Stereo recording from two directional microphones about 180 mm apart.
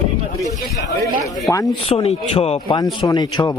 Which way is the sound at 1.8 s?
35° left (ahead or behind).